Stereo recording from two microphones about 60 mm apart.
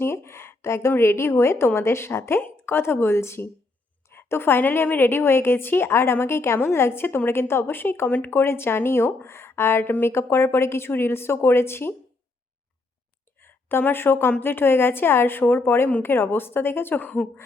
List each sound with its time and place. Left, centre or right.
0.0 s a woman's voice: left
13.4 s speech: left